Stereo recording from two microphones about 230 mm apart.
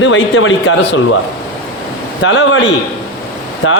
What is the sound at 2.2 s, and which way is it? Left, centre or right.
Speech, left.